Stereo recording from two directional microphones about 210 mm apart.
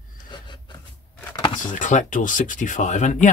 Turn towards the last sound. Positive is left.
turn(degrees=35)  # may be behind; listen again after turning